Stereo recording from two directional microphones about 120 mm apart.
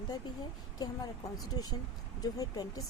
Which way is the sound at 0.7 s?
35° left (ahead or behind).